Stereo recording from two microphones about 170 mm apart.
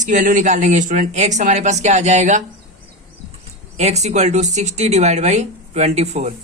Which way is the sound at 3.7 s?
40° right (ahead or behind).